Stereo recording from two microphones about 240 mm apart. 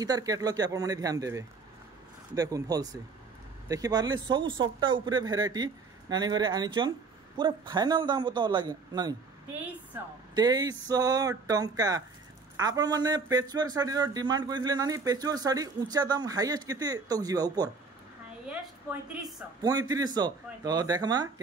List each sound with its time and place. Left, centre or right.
0.0 s a man's voice: centre
18.5 s a woman's voice: centre
19.6 s a man's voice: centre